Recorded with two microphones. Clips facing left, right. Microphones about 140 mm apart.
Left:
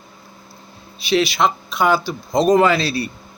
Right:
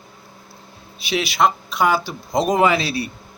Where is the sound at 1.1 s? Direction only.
5° right (ahead or behind).